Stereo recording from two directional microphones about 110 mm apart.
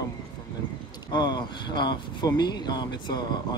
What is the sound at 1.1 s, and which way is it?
Speech, 40° left (ahead or behind).